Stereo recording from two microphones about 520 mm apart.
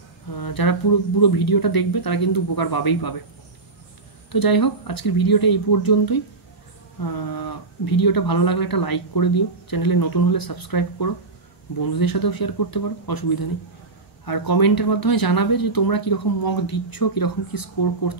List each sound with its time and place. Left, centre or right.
0.3 s speech: left
4.3 s speech: left